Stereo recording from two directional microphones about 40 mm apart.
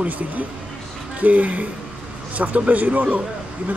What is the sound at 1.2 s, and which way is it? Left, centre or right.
Speech, right.